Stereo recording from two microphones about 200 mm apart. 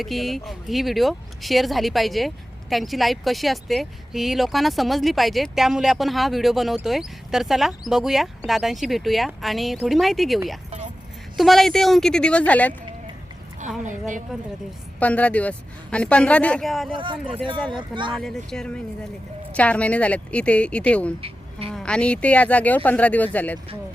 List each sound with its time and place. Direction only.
0.0 s speech: centre (ahead or behind)
14.9 s speech: 5° left (ahead or behind)
16.9 s speech: 25° right (ahead or behind)
18.2 s speech: 5° left (ahead or behind)
21.2 s a sound: 25° right (ahead or behind)
21.7 s speech: 5° left (ahead or behind)